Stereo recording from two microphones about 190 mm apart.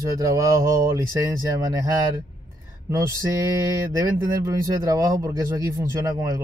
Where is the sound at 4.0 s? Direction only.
15° right (ahead or behind).